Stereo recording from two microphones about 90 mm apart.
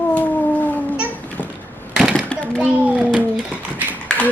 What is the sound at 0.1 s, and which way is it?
Cat, 15° left (ahead or behind).